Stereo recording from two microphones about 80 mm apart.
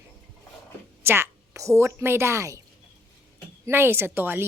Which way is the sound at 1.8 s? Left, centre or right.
Right.